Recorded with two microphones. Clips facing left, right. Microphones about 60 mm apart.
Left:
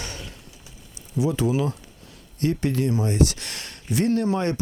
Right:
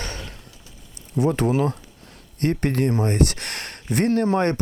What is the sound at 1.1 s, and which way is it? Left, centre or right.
Speech, right.